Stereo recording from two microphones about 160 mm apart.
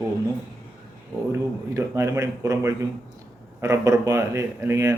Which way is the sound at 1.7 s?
20° right (ahead or behind).